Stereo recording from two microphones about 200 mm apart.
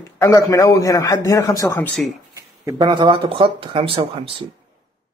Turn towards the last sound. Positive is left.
turn(degrees=-25)  # may be behind; listen again after turning